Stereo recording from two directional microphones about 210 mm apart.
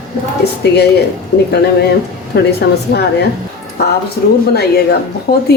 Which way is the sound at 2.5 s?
50° left (ahead or behind).